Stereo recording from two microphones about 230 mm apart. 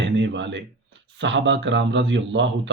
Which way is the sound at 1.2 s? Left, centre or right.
Right.